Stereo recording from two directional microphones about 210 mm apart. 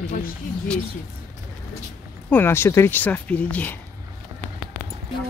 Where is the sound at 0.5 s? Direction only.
40° left (ahead or behind).